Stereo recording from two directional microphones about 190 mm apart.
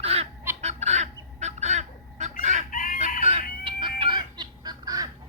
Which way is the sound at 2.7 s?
45° left (ahead or behind).